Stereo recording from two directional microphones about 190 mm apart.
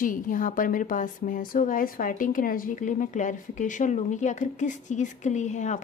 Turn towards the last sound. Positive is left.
turn(degrees=40)  # may be behind; listen again after turning